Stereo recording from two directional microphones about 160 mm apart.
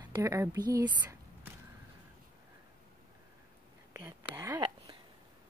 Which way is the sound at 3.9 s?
15° right (ahead or behind).